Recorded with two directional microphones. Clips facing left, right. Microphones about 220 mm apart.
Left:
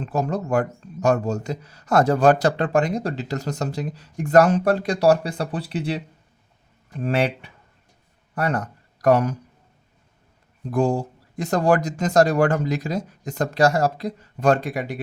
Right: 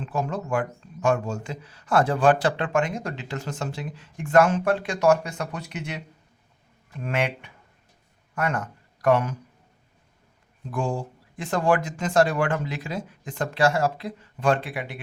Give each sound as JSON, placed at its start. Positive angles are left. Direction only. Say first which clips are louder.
{"t": 0.0, "sound": "speech", "louder": "left 4 dB", "side_deg": 40}
{"t": 10.7, "sound": "speech", "louder": "left 7 dB", "side_deg": 40}